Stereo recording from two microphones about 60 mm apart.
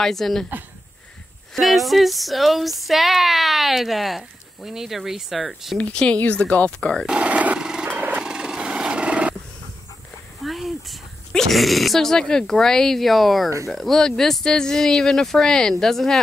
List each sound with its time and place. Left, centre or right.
0.0 s speech: centre
1.5 s speech: centre
5.8 s speech: left
7.1 s dog: right
7.9 s a sound: right
8.2 s a sound: centre
10.4 s speech: centre